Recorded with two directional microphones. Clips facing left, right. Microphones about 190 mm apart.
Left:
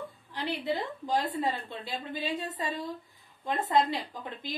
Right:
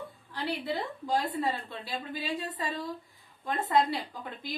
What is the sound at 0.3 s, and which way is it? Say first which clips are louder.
A woman's voice: left 1 dB; 20° left (ahead or behind).